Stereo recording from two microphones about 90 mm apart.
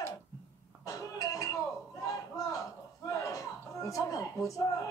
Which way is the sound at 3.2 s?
35° left (ahead or behind).